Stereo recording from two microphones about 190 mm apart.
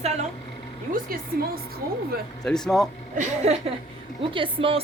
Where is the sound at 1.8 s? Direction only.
50° right (ahead or behind).